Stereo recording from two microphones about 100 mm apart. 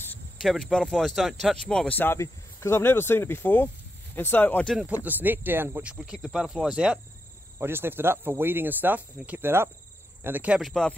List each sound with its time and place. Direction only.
0.4 s speech: 5° left (ahead or behind)
2.0 s speech: 20° left (ahead or behind)
4.8 s speech: 15° right (ahead or behind)
7.5 s speech: 20° right (ahead or behind)
10.6 s speech: 5° left (ahead or behind)